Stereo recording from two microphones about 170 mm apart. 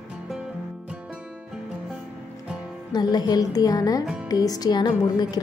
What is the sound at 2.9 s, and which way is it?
A woman's voice, 25° left (ahead or behind).